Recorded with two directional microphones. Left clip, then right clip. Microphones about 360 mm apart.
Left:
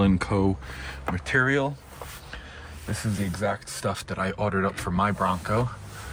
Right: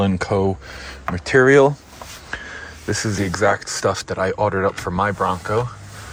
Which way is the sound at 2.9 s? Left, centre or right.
Centre.